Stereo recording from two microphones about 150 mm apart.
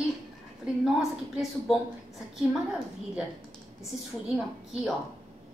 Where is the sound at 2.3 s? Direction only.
5° right (ahead or behind).